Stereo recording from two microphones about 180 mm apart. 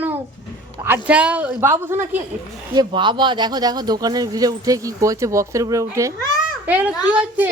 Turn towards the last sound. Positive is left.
turn(degrees=-10)  # may be behind; listen again after turning